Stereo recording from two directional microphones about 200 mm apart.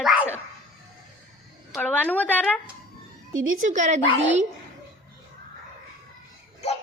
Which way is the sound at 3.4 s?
90° right.